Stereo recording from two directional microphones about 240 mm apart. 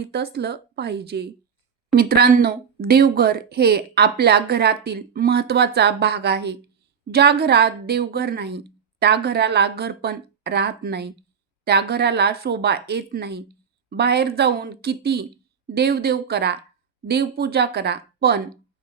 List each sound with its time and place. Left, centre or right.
0.0 s a woman's voice: right